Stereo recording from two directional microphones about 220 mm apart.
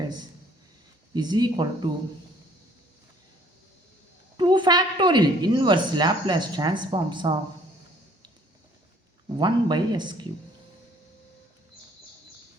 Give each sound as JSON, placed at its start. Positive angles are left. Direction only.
{"t": 1.1, "sound": "a woman's voice", "side_deg": -20}
{"t": 4.4, "sound": "a woman's voice", "side_deg": -20}
{"t": 9.4, "sound": "a woman's voice", "side_deg": -20}